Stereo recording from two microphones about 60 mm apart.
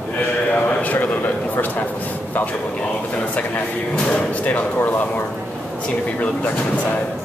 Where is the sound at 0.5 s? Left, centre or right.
Left.